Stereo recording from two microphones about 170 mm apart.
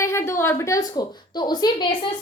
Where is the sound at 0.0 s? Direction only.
15° left (ahead or behind).